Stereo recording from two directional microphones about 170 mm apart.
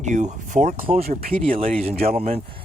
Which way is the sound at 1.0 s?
60° right (ahead or behind).